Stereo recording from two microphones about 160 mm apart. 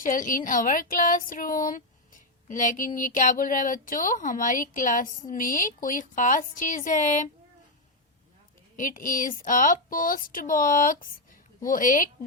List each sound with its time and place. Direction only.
0.0 s speech: 55° left (ahead or behind)
8.7 s speech: 55° left (ahead or behind)